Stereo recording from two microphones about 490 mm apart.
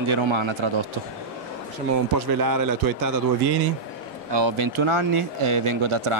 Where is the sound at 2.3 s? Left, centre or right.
Right.